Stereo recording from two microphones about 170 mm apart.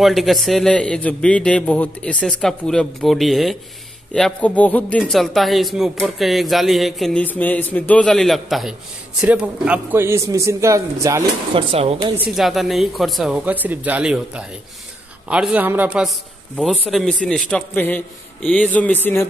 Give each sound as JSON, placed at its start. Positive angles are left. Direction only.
{"t": 0.0, "sound": "a man's voice", "side_deg": 0}
{"t": 11.5, "sound": "speech", "side_deg": -35}
{"t": 12.4, "sound": "a man's voice", "side_deg": 0}